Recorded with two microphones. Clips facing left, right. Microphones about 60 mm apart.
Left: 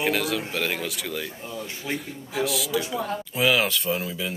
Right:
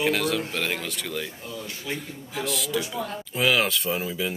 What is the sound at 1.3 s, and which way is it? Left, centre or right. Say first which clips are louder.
Speech: left 2 dB; left.